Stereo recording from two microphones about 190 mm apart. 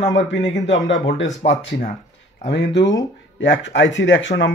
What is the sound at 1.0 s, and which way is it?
Speech, 75° left (ahead or behind).